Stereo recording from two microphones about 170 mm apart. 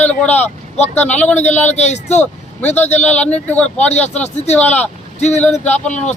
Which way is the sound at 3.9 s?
40° left (ahead or behind).